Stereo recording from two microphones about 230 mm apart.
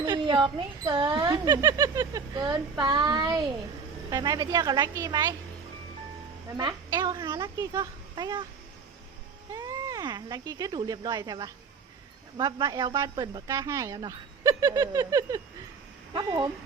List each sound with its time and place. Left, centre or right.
0.0 s speech: centre
6.6 s speech: centre
9.5 s speech: centre